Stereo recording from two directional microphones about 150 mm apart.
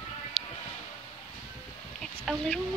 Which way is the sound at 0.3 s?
5° left (ahead or behind).